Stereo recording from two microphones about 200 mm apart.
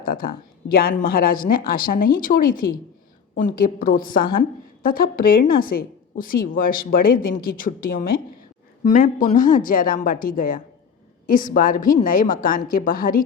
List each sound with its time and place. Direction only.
0.0 s a woman's voice: 45° left (ahead or behind)